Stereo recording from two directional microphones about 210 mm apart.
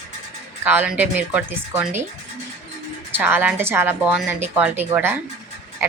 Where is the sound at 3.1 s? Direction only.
10° right (ahead or behind).